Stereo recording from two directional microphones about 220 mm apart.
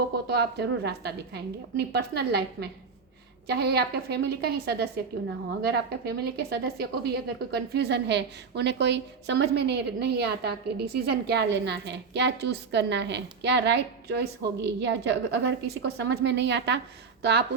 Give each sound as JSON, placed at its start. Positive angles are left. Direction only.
{"t": 0.3, "sound": "a woman's voice", "side_deg": -50}